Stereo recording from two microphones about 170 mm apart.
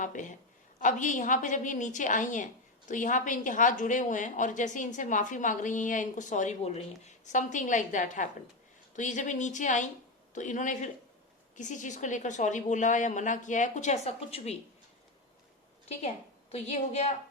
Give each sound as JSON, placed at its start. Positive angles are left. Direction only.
{"t": 0.0, "sound": "a woman's voice", "side_deg": 50}
{"t": 15.9, "sound": "a woman's voice", "side_deg": 40}